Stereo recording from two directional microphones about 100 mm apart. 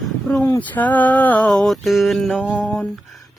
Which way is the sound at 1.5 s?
Centre (ahead or behind).